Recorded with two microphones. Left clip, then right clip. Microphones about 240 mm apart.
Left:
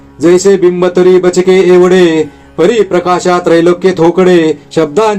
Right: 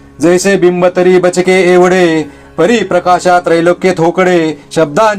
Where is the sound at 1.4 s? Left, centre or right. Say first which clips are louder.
Left 2 dB; centre.